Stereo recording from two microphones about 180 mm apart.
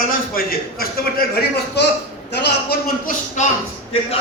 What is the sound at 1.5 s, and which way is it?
A man's voice, 65° left (ahead or behind).